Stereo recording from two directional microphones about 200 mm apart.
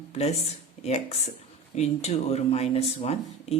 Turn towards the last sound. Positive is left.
turn(degrees=30)  # may be behind; listen again after turning